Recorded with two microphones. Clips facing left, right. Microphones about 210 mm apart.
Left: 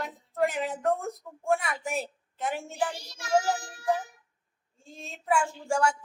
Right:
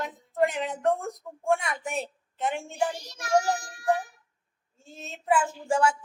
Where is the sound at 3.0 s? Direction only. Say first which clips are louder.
Even; 25° left (ahead or behind).